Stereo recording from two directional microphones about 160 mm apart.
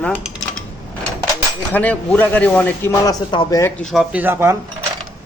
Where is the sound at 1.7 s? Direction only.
10° left (ahead or behind).